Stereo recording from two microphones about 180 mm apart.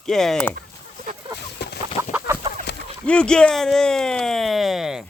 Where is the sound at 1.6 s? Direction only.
65° left (ahead or behind).